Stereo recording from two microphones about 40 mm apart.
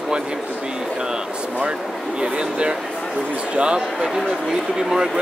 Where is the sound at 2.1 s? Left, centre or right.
Right.